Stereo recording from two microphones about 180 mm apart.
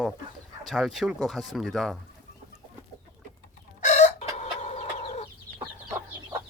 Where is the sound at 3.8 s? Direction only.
40° left (ahead or behind).